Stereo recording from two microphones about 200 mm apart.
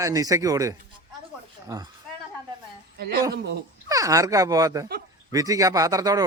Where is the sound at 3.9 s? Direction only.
15° right (ahead or behind).